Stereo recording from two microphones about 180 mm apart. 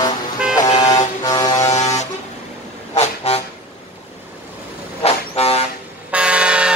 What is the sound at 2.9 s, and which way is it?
Vehicle, 35° left (ahead or behind).